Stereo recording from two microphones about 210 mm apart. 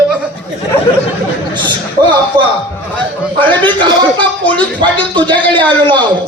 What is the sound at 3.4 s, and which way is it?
Speech, 25° right (ahead or behind).